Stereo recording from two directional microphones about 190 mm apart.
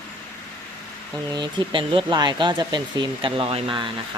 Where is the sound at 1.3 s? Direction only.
25° right (ahead or behind).